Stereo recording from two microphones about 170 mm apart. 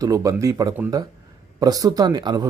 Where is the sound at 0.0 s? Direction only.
20° right (ahead or behind).